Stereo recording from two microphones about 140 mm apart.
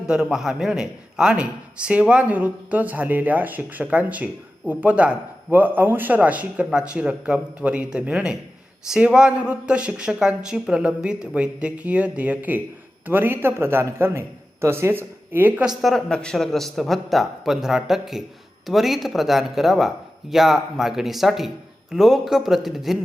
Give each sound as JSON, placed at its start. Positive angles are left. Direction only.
{"t": 0.0, "sound": "a man's voice", "side_deg": -5}
{"t": 15.8, "sound": "speech", "side_deg": 0}